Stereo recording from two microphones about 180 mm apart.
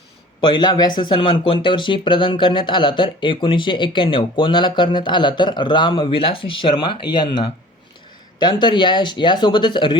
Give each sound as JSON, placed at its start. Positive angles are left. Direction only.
{"t": 0.4, "sound": "speech", "side_deg": 25}
{"t": 8.4, "sound": "speech", "side_deg": 25}